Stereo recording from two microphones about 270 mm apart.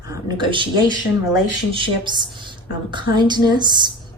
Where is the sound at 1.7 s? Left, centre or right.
Centre.